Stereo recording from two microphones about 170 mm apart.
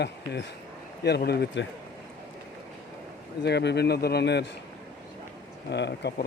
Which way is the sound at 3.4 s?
85° left.